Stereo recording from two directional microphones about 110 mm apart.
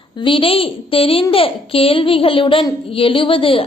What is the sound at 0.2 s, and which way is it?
A child's voice, 50° left (ahead or behind).